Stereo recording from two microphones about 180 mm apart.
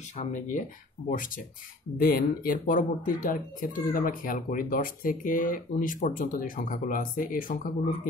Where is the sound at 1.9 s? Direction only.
50° left (ahead or behind).